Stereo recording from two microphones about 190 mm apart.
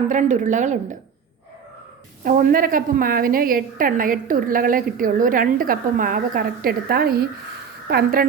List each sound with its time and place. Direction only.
0.1 s a woman's voice: 40° right (ahead or behind)
2.2 s a woman's voice: 50° right (ahead or behind)